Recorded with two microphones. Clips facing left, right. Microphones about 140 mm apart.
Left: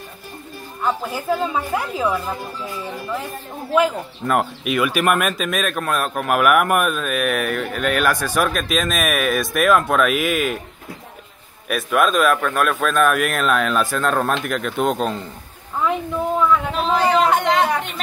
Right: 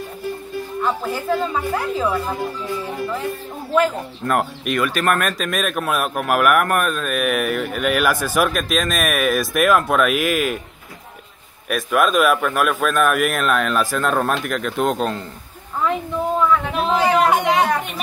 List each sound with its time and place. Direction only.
0.8 s speech: 5° left (ahead or behind)
3.7 s speech: 5° left (ahead or behind)
11.7 s speech: centre (ahead or behind)
16.4 s a sound: centre (ahead or behind)